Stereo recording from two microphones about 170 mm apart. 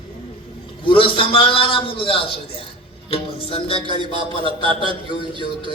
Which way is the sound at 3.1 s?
30° left (ahead or behind).